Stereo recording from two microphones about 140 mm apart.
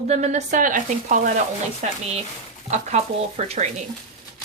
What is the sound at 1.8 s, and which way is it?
A woman's voice, 55° right (ahead or behind).